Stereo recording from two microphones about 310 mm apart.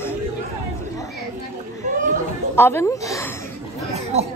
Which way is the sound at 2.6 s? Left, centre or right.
Centre.